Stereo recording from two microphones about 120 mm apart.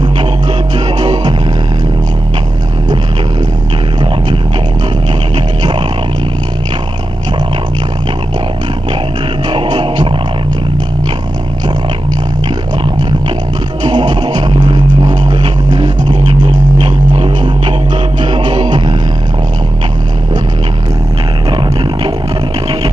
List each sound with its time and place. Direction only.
9.5 s music: 40° right (ahead or behind)
13.8 s music: 35° right (ahead or behind)